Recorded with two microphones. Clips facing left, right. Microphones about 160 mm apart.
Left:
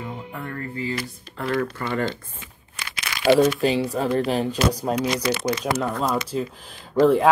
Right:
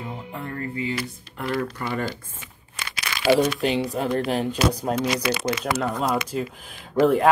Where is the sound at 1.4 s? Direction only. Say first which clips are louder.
Left 2 dB; 5° right (ahead or behind).